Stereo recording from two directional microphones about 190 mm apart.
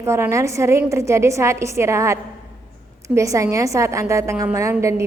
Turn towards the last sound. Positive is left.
turn(degrees=-15)  # may be behind; listen again after turning